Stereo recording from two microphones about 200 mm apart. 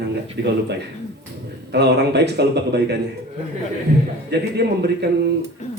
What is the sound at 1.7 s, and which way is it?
Speech, 55° right (ahead or behind).